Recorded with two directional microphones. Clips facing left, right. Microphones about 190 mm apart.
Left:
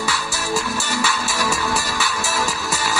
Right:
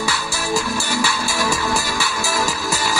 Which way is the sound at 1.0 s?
Centre (ahead or behind).